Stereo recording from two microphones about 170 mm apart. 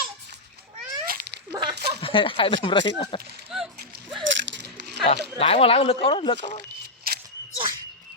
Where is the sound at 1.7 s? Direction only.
75° right (ahead or behind).